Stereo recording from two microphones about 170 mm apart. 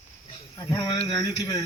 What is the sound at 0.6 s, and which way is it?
Speech, 25° left (ahead or behind).